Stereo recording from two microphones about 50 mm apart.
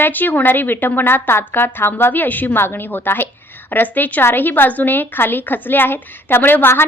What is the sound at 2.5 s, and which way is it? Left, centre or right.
A woman's voice, left.